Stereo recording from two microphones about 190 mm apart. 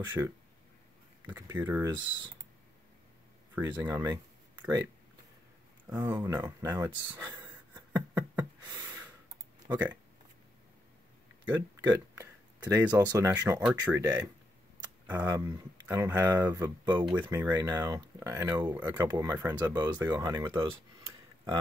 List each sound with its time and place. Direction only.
1.2 s speech: 10° right (ahead or behind)
1.9 s speech: 25° right (ahead or behind)
3.5 s speech: 10° right (ahead or behind)
4.0 s a sound: 15° right (ahead or behind)
9.7 s speech: 10° right (ahead or behind)
11.4 s a sound: 10° right (ahead or behind)
12.9 s speech: 20° right (ahead or behind)